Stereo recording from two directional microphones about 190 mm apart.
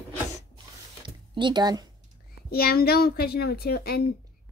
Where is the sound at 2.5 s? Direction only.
55° left (ahead or behind).